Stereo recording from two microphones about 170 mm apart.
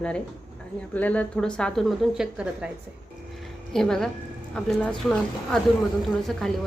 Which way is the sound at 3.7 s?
5° left (ahead or behind).